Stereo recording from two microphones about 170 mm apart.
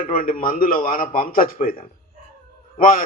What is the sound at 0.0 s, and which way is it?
A man's voice, 55° left (ahead or behind).